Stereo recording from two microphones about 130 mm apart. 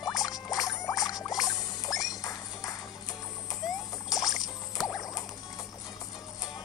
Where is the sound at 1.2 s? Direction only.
30° left (ahead or behind).